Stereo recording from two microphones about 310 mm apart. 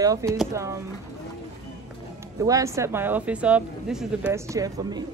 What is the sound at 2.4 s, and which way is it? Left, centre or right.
Speech, centre.